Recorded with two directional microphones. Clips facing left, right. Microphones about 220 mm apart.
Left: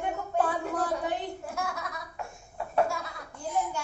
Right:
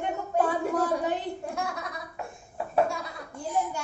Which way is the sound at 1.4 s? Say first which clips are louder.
Right 2 dB; centre (ahead or behind).